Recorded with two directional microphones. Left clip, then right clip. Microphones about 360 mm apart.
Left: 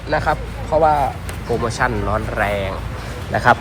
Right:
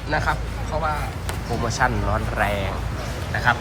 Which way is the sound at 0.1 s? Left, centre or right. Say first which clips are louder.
Left 5 dB; centre.